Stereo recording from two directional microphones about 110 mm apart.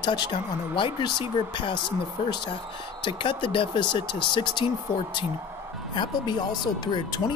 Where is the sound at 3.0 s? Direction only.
50° left (ahead or behind).